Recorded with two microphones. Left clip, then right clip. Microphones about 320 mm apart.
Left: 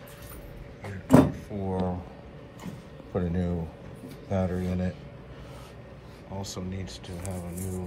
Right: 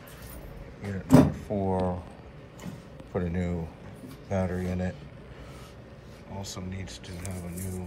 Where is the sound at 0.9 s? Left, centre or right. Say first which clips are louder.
Even; left.